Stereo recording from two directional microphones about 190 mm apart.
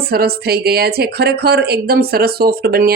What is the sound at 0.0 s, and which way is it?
Speech, 55° right (ahead or behind).